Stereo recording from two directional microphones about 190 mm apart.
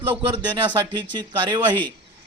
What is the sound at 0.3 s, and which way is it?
A man's voice, 25° right (ahead or behind).